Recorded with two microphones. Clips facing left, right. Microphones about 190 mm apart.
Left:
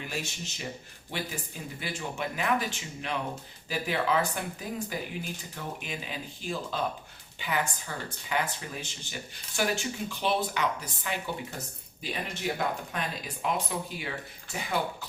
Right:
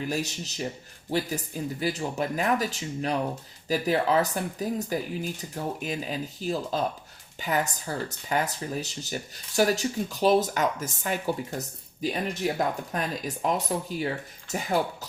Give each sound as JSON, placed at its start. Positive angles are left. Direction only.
{"t": 0.0, "sound": "speech", "side_deg": -40}
{"t": 1.8, "sound": "speech", "side_deg": -40}
{"t": 12.3, "sound": "speech", "side_deg": -40}